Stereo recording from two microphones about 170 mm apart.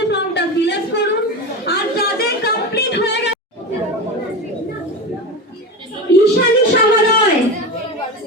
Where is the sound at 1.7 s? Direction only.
65° left (ahead or behind); by 3.3 s 90° left.